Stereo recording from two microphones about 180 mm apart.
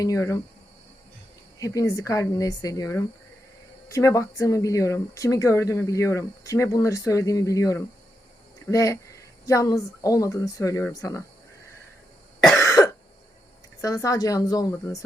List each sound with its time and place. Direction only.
0.0 s speech: 20° left (ahead or behind)
1.5 s speech: 20° left (ahead or behind)
12.5 s cough: 15° left (ahead or behind)
13.8 s speech: 20° left (ahead or behind)